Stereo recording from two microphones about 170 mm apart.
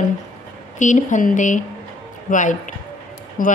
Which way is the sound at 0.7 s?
45° left (ahead or behind).